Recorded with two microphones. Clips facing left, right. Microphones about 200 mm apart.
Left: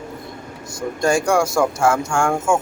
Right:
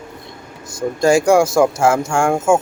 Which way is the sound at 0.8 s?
25° right (ahead or behind).